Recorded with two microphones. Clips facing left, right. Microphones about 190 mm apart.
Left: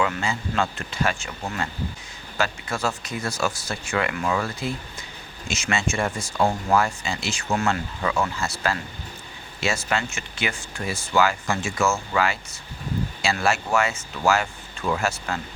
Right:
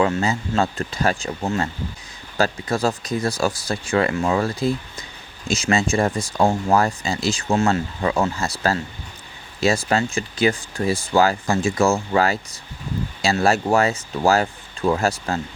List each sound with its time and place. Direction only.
0.0 s speech: 35° right (ahead or behind)